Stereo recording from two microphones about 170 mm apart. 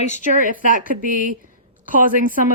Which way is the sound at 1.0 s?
55° right (ahead or behind).